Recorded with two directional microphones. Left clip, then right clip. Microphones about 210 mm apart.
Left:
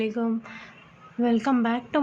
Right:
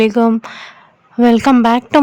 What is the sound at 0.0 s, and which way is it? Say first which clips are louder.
A woman's voice: right 15 dB; 50° right (ahead or behind).